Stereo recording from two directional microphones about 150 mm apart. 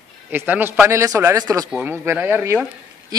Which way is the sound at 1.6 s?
5° right (ahead or behind).